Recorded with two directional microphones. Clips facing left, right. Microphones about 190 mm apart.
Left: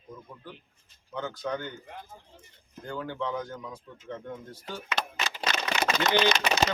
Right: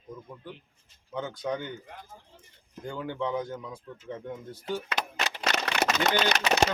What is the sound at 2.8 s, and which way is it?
Speech, 15° right (ahead or behind).